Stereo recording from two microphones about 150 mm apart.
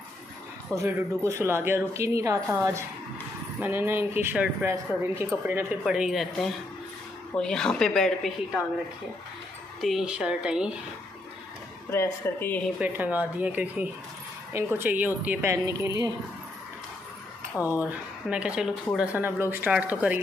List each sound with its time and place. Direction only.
0.7 s speech: 20° right (ahead or behind)
5.9 s speech: centre (ahead or behind)
9.8 s speech: centre (ahead or behind)
11.9 s speech: 15° left (ahead or behind)
12.7 s speech: 10° right (ahead or behind)
17.6 s speech: 20° left (ahead or behind)
17.8 s speech: 10° right (ahead or behind)